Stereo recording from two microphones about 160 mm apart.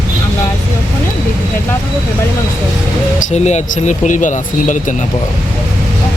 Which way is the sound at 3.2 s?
45° left (ahead or behind).